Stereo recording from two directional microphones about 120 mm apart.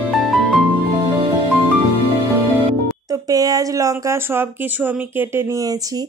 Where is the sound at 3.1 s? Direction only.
30° right (ahead or behind).